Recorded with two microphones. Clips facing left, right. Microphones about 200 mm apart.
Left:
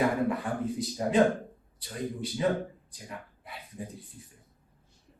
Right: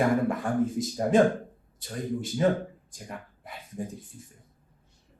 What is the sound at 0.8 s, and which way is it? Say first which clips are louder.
A man's voice: right 1 dB; 45° right (ahead or behind).